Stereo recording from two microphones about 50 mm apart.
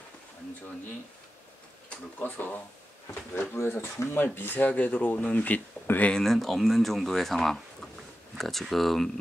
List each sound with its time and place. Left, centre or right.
2.1 s speech: left
3.5 s speech: left
4.1 s speech: left
6.1 s speech: centre